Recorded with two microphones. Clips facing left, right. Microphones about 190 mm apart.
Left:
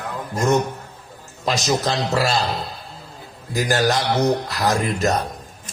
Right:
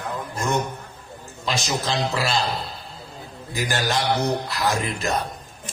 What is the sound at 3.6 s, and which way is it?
A man's voice, 40° left (ahead or behind).